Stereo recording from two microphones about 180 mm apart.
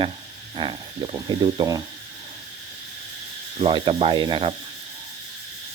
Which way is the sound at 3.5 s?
30° right (ahead or behind).